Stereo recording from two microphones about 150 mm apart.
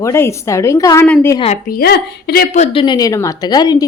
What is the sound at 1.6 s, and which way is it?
Speech, 85° left.